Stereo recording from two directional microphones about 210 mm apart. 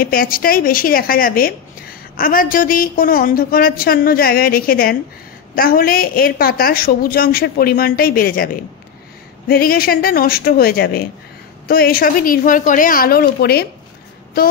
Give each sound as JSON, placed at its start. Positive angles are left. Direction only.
{"t": 0.0, "sound": "speech", "side_deg": 45}
{"t": 9.5, "sound": "speech", "side_deg": 45}